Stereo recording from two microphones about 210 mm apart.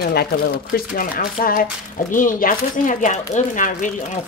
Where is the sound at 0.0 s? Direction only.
50° left (ahead or behind).